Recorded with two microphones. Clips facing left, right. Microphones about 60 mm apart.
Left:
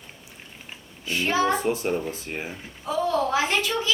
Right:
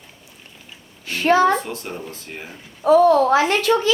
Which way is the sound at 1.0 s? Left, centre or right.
Right.